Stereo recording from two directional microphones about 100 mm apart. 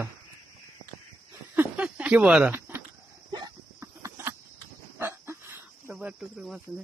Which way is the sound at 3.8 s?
30° right (ahead or behind).